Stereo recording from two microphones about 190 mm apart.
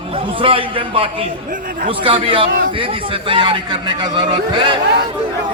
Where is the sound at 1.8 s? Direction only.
25° right (ahead or behind).